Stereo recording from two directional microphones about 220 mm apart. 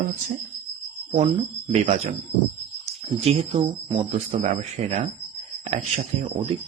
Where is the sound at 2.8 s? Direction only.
25° right (ahead or behind).